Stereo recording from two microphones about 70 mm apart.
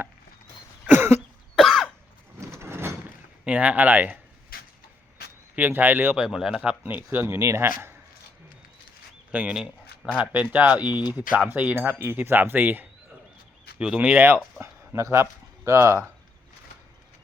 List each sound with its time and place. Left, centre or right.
0.9 s cough: right
1.5 s cough: centre
2.5 s a sound: right
3.4 s speech: right
5.5 s speech: right
6.1 s speech: centre
6.7 s speech: right
7.3 s speech: right
7.6 s speech: right
9.5 s speech: centre
10.2 s speech: centre
13.7 s speech: centre
14.6 s speech: right